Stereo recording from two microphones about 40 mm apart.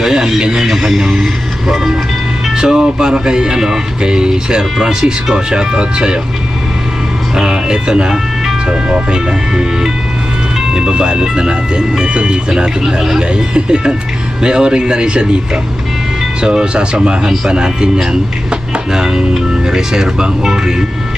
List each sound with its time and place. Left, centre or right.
0.0 s radio: centre
0.7 s vehicle: centre
2.5 s speech: centre
7.3 s ice cream truck: centre
8.9 s speech: right
12.8 s speech: centre
13.3 s speech: right
16.4 s speech: right